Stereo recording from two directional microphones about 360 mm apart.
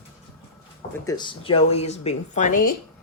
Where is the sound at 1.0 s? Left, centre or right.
Centre.